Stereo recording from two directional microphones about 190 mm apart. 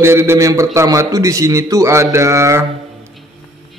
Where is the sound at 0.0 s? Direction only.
15° right (ahead or behind).